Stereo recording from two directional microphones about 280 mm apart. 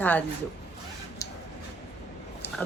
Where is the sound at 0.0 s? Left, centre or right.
Centre.